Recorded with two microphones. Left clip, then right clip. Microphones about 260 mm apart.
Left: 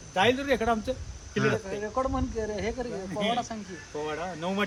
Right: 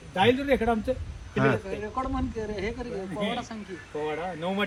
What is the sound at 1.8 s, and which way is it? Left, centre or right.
Speech, left.